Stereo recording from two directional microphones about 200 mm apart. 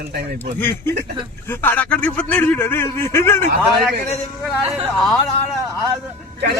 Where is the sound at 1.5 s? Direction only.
10° left (ahead or behind).